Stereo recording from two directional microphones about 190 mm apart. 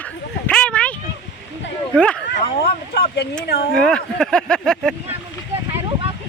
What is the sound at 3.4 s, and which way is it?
Speech, 55° left (ahead or behind).